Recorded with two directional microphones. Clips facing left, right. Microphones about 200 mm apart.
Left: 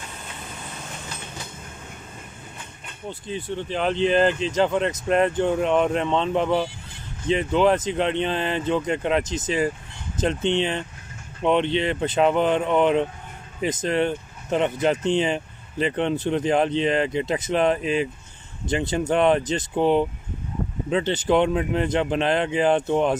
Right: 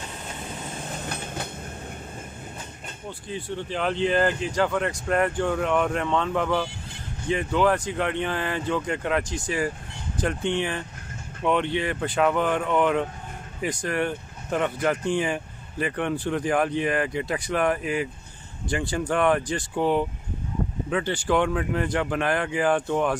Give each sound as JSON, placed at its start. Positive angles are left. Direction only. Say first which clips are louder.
{"t": 1.0, "sound": "train", "louder": "right 5 dB", "side_deg": -60}
{"t": 3.1, "sound": "speech", "louder": "left 3 dB", "side_deg": 20}